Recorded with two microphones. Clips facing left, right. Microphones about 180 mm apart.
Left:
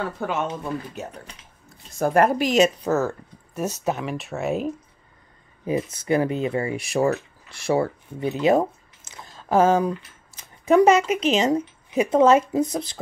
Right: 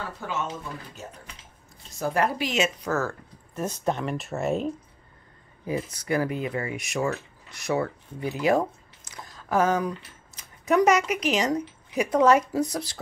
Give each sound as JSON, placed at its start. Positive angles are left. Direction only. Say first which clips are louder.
{"t": 0.2, "sound": "speech", "louder": "left 3 dB", "side_deg": 60}
{"t": 2.0, "sound": "a woman's voice", "louder": "left 7 dB", "side_deg": 50}
{"t": 2.9, "sound": "speech", "louder": "left 5 dB", "side_deg": 20}
{"t": 3.5, "sound": "speech", "louder": "left 2 dB", "side_deg": 10}
{"t": 5.7, "sound": "speech", "louder": "left 5 dB", "side_deg": 25}